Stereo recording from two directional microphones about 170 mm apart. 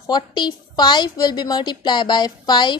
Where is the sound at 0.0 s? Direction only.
25° left (ahead or behind).